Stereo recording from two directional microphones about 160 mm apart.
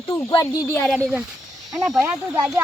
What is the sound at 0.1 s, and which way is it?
Speech, 25° left (ahead or behind).